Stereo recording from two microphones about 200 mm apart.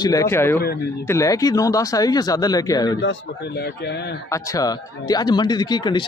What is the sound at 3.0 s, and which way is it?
A man's voice, 60° left (ahead or behind).